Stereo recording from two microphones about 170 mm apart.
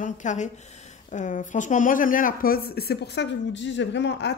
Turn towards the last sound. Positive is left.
turn(degrees=90)